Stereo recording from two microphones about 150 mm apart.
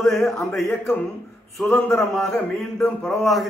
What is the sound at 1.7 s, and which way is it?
Speech, 15° left (ahead or behind).